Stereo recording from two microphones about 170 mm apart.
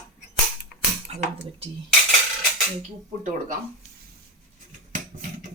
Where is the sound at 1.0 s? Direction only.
35° right (ahead or behind).